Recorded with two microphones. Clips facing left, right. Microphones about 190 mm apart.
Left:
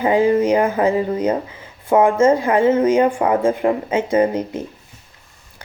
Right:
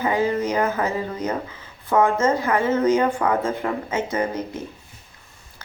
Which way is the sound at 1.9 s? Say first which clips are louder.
Left 5 dB; 25° left (ahead or behind).